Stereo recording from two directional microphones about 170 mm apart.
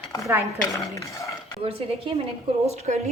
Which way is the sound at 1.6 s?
35° right (ahead or behind).